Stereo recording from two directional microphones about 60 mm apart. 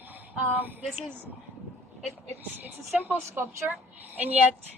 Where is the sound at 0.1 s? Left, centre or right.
Right.